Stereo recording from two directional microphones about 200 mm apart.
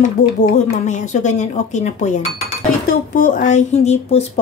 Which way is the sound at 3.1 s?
40° left (ahead or behind).